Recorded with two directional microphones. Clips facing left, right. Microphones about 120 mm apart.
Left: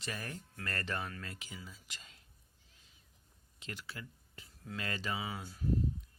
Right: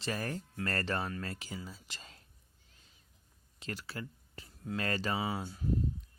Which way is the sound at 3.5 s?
40° right (ahead or behind).